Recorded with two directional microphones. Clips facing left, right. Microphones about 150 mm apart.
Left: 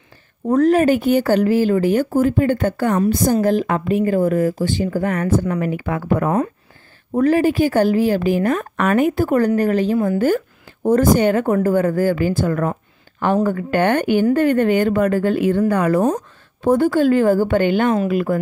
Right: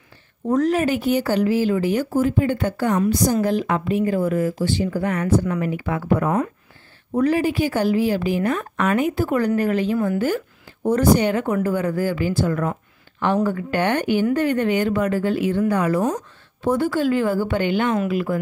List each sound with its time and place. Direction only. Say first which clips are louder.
0.5 s speech: left 5 dB; 50° left (ahead or behind)
6.2 s a woman's voice: left 3 dB; 35° left (ahead or behind)
7.2 s a woman's voice: left 4 dB; 45° left (ahead or behind)